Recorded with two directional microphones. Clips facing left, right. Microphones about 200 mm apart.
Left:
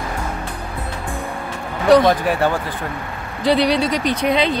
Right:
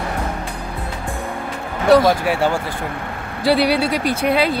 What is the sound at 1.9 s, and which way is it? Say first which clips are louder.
Speech: even; 5° right (ahead or behind).